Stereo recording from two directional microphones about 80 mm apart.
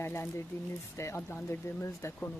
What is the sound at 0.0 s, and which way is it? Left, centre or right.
Speech, left.